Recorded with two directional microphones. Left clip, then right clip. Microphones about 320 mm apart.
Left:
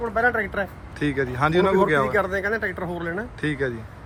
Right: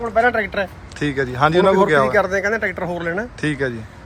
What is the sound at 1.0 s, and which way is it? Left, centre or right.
Speech, centre.